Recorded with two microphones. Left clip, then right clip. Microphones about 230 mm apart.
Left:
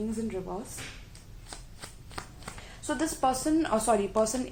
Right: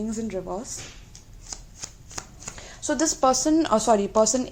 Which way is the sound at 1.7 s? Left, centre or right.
Right.